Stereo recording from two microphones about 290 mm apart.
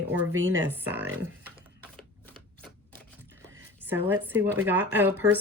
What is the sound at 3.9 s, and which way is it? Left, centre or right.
Speech, centre.